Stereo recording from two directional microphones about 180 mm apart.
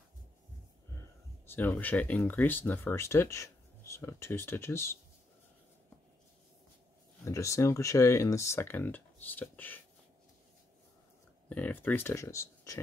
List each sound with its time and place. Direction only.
0.9 s speech: 15° left (ahead or behind)
7.2 s speech: 15° left (ahead or behind)
11.4 s speech: 10° left (ahead or behind)